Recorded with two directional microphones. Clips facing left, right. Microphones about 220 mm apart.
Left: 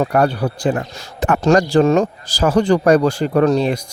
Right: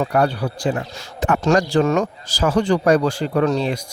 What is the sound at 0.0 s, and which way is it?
Speech, 50° left (ahead or behind).